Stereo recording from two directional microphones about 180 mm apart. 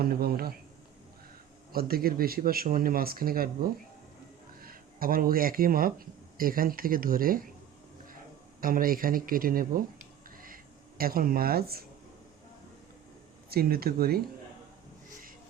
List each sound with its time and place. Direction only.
0.0 s speech: 55° right (ahead or behind)
1.7 s speech: 55° right (ahead or behind)
8.6 s speech: 50° right (ahead or behind)
10.2 s a sound: 50° right (ahead or behind)
13.5 s speech: 60° right (ahead or behind)